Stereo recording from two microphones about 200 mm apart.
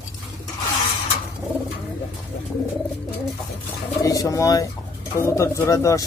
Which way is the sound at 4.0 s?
15° left (ahead or behind).